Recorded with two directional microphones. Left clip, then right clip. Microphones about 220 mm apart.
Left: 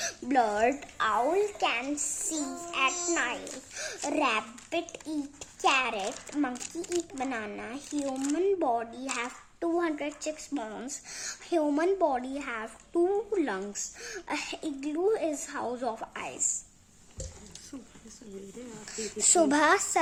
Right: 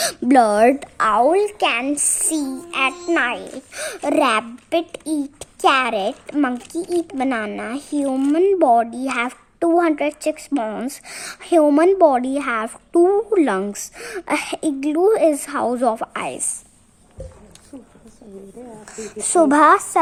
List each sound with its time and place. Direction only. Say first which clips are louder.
0.0 s speech: right 12 dB; 50° right (ahead or behind)
18.9 s a woman's voice: right 9 dB; 15° right (ahead or behind)